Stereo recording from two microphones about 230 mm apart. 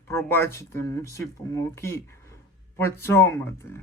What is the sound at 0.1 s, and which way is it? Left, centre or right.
Speech, centre.